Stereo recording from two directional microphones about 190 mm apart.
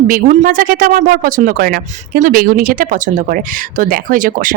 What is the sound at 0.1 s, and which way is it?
Speech, 45° right (ahead or behind).